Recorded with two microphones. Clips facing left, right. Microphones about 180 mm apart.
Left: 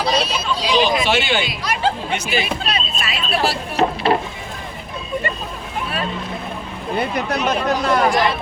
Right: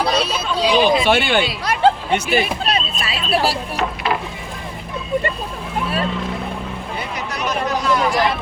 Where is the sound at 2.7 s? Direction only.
35° right (ahead or behind).